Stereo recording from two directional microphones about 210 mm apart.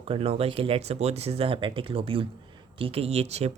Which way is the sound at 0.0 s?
25° right (ahead or behind).